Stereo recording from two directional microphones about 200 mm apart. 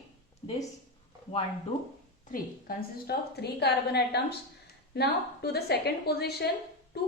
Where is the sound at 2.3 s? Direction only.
50° left (ahead or behind).